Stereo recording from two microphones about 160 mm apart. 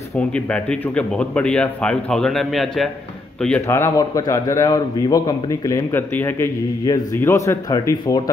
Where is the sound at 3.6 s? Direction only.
15° left (ahead or behind).